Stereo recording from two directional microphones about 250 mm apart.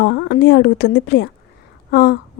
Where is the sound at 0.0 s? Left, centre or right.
Left.